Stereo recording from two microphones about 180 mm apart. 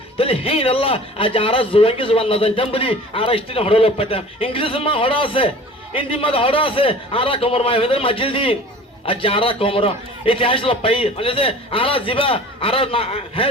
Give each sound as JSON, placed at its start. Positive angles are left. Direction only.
{"t": 0.2, "sound": "a man's voice", "side_deg": 30}